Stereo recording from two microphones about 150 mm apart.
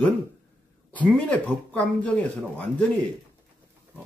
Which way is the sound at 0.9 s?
10° left (ahead or behind).